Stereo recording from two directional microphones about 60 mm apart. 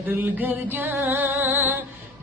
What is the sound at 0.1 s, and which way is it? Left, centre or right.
Music, right.